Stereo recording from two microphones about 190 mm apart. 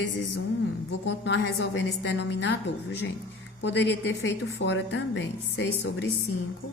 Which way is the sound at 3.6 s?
65° left (ahead or behind).